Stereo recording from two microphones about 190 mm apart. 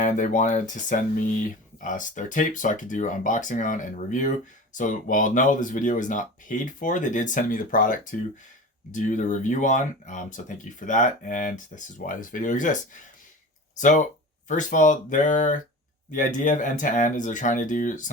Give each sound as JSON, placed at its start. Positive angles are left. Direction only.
{"t": 0.0, "sound": "speech", "side_deg": 40}